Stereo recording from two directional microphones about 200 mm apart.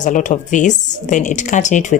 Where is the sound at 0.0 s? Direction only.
40° left (ahead or behind).